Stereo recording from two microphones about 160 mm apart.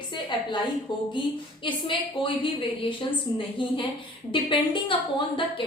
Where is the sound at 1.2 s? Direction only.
30° left (ahead or behind).